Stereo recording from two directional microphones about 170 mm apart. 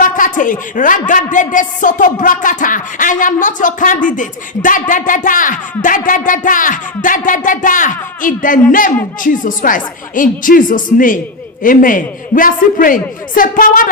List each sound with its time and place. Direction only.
0.0 s speech: 50° left (ahead or behind)